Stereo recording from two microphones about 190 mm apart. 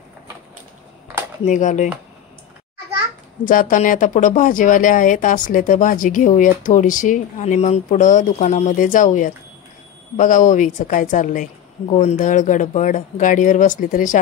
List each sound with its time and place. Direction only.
1.4 s speech: 40° left (ahead or behind)
3.4 s speech: 45° left (ahead or behind)